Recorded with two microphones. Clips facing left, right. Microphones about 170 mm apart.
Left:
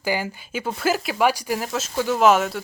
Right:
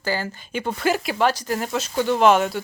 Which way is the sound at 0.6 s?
Centre (ahead or behind).